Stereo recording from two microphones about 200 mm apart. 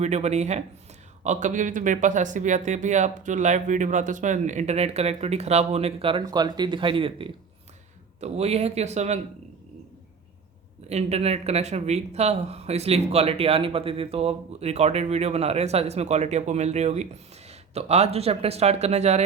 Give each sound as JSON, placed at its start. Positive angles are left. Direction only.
{"t": 0.0, "sound": "speech", "side_deg": -35}
{"t": 10.8, "sound": "speech", "side_deg": -30}